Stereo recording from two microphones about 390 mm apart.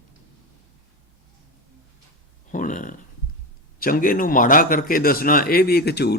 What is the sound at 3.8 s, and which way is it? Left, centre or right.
A man's voice, left.